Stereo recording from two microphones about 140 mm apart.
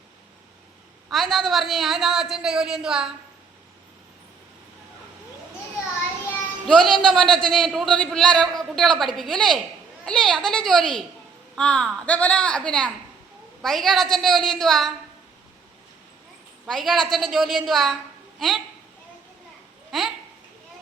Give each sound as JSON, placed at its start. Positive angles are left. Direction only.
{"t": 1.1, "sound": "a man's voice", "side_deg": 0}
{"t": 6.7, "sound": "a man's voice", "side_deg": 0}
{"t": 16.6, "sound": "a man's voice", "side_deg": 0}
{"t": 19.9, "sound": "speech", "side_deg": 0}